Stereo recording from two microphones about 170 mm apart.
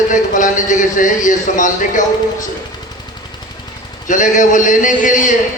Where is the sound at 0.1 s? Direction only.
50° left (ahead or behind).